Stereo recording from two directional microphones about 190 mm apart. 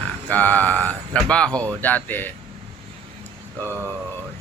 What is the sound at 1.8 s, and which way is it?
Speech, 10° left (ahead or behind).